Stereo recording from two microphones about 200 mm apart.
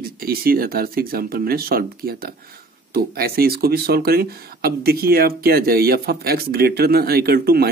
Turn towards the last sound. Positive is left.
turn(degrees=-50)  # may be behind; listen again after turning